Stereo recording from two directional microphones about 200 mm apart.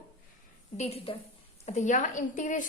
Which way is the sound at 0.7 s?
30° left (ahead or behind).